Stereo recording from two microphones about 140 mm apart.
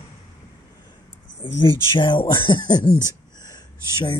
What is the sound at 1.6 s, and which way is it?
Speech, 35° left (ahead or behind).